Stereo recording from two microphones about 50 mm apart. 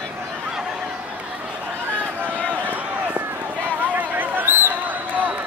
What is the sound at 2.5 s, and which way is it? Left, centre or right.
Run, right.